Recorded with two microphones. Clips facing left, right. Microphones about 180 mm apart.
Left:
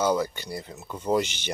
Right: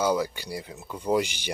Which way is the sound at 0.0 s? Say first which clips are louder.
Left 1 dB; 10° right (ahead or behind).